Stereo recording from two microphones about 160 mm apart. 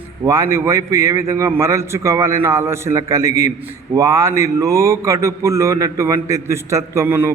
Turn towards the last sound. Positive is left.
turn(degrees=-15)  # may be behind; listen again after turning